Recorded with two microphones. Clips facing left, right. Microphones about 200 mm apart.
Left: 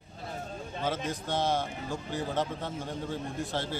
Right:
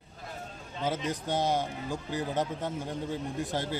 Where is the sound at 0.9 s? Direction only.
15° right (ahead or behind).